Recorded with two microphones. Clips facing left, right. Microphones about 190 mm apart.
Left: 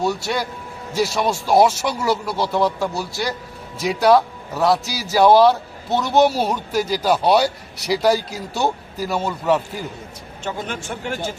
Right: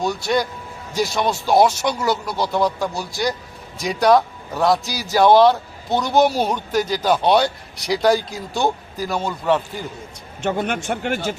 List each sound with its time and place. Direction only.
0.0 s a man's voice: 5° left (ahead or behind)
10.4 s a man's voice: 65° right (ahead or behind)